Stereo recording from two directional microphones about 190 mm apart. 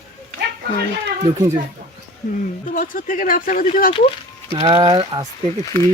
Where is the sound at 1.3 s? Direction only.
20° right (ahead or behind).